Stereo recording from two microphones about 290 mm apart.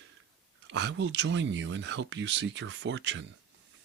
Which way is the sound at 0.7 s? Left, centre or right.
Right.